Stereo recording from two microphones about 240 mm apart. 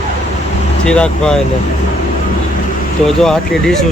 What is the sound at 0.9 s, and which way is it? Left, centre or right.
Speech, centre.